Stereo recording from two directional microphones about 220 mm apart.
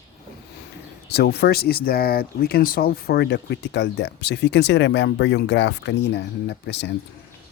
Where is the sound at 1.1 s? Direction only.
45° left (ahead or behind).